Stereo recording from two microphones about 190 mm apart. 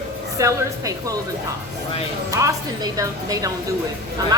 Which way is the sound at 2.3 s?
15° right (ahead or behind).